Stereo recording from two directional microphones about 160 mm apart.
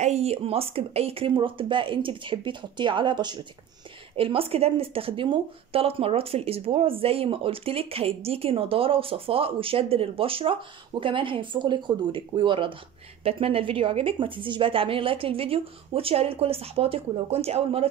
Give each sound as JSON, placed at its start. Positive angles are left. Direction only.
{"t": 0.0, "sound": "speech", "side_deg": -40}